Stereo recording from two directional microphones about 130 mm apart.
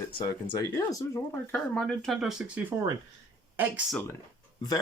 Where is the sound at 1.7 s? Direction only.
5° left (ahead or behind).